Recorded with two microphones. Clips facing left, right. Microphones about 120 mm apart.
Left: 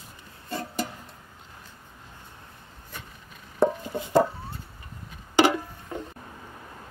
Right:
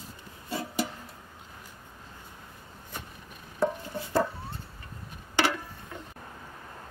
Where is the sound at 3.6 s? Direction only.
20° left (ahead or behind).